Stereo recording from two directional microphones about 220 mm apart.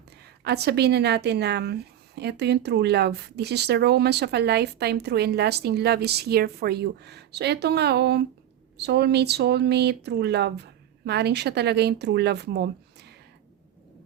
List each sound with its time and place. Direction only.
0.4 s a woman's voice: 50° right (ahead or behind)